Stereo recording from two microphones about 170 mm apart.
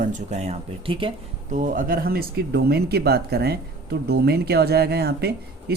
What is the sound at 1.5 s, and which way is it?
Speech, 50° right (ahead or behind).